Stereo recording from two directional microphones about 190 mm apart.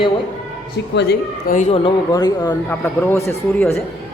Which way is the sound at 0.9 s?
65° left (ahead or behind).